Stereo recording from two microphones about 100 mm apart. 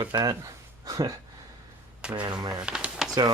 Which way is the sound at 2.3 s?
40° right (ahead or behind).